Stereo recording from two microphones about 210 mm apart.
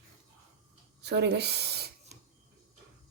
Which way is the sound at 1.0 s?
55° right (ahead or behind).